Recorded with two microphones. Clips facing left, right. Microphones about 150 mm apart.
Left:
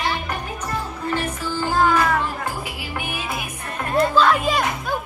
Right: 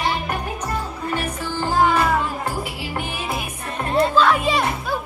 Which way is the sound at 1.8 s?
10° right (ahead or behind).